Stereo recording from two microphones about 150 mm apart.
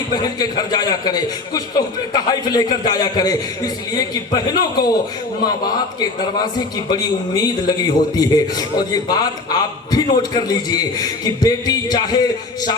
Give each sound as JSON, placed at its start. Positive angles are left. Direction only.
{"t": 0.1, "sound": "a man's voice", "side_deg": 25}
{"t": 6.9, "sound": "a man's voice", "side_deg": 25}